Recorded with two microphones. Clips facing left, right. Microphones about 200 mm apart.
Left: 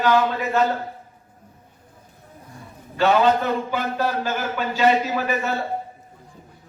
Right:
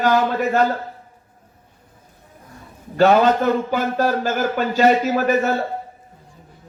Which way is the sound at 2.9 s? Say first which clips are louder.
Right 3 dB; 40° right (ahead or behind).